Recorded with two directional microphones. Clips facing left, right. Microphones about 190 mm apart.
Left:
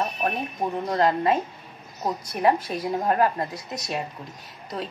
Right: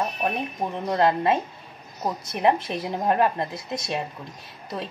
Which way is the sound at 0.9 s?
25° right (ahead or behind).